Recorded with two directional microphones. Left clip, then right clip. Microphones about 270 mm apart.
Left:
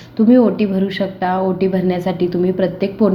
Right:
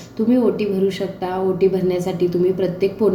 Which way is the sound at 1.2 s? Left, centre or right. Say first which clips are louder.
Even; left.